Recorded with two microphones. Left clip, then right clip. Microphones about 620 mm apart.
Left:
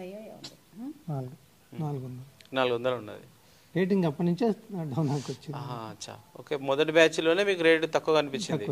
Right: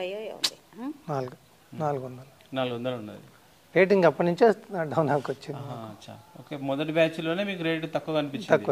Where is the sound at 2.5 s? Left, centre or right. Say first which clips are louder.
Left 3 dB; left.